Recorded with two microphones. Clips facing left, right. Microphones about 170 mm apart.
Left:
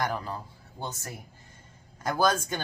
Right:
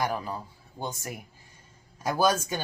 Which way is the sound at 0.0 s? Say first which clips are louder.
Right 1 dB; 10° right (ahead or behind).